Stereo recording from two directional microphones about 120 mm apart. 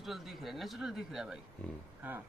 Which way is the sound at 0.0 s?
Centre (ahead or behind).